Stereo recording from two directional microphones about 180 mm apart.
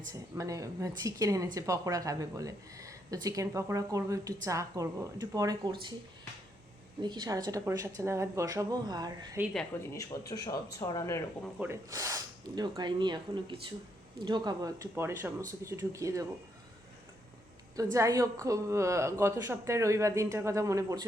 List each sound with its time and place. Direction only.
0.1 s a woman's voice: 20° right (ahead or behind)
7.0 s a woman's voice: 25° right (ahead or behind)
9.9 s speech: 20° left (ahead or behind)
11.6 s a woman's voice: 15° right (ahead or behind)
17.9 s a woman's voice: 15° right (ahead or behind)